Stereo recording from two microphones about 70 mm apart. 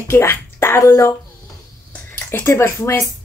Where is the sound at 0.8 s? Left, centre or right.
Left.